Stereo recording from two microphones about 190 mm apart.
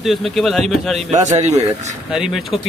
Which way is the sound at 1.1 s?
35° right (ahead or behind).